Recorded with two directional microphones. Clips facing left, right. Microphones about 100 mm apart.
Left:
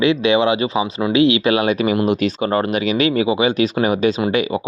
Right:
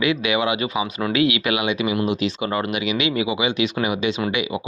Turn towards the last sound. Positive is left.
turn(degrees=40)  # may be behind; listen again after turning